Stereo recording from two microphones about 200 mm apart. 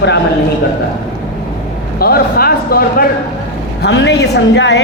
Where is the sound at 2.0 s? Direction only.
50° left (ahead or behind).